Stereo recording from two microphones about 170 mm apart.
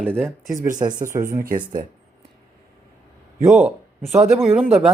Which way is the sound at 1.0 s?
50° right (ahead or behind).